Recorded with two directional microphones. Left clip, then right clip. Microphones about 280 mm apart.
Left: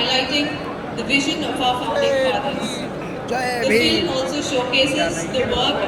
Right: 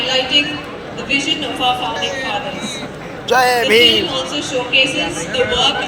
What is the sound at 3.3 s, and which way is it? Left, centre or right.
Speech, right.